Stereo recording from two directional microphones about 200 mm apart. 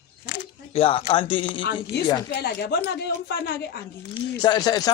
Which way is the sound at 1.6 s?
65° left (ahead or behind).